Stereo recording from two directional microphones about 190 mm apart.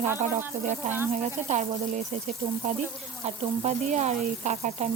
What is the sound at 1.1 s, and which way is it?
A woman's voice, 35° right (ahead or behind).